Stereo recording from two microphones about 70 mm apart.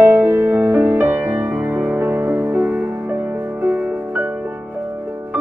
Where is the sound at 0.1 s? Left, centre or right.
Right.